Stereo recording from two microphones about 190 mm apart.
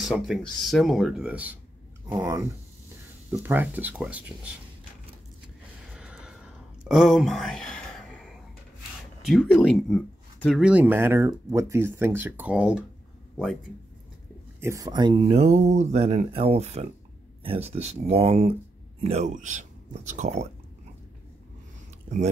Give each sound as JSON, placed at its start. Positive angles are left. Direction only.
{"t": 0.0, "sound": "speech", "side_deg": 0}
{"t": 2.0, "sound": "speech", "side_deg": -20}
{"t": 5.9, "sound": "a sound", "side_deg": -5}
{"t": 9.2, "sound": "speech", "side_deg": 5}
{"t": 10.6, "sound": "speech", "side_deg": -10}
{"t": 14.6, "sound": "speech", "side_deg": -15}